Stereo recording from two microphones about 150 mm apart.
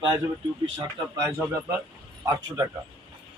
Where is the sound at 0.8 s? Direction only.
25° right (ahead or behind).